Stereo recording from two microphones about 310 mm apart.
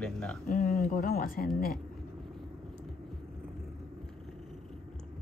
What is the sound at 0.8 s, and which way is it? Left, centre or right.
Speech, left.